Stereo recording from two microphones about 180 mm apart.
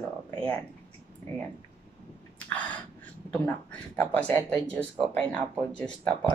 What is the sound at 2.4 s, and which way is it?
Speech, 10° left (ahead or behind).